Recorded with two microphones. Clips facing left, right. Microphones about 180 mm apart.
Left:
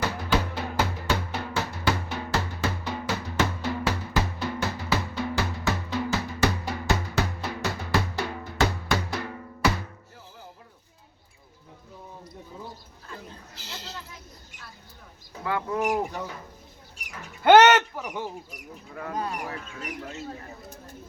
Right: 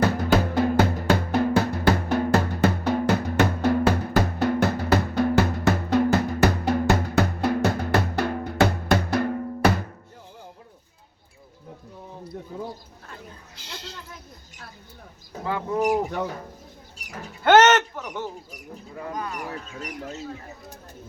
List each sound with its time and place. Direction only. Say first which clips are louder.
0.5 s drum: right 8 dB; 50° right (ahead or behind)
12.5 s a sound: right 7 dB; 65° right (ahead or behind)
15.4 s bird: right 2 dB; 20° right (ahead or behind)
16.1 s speech: right 6 dB; 60° right (ahead or behind)
17.4 s a sound: even; 10° left (ahead or behind)
19.1 s speech: left 2 dB; 30° left (ahead or behind)
19.5 s speech: right 2 dB; 40° right (ahead or behind)